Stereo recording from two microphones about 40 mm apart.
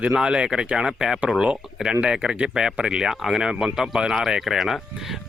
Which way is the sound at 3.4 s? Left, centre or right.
Right.